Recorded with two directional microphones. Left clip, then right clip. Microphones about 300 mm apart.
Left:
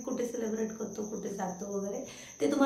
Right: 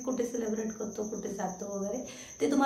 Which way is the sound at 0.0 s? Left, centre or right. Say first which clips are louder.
Right 2 dB; centre.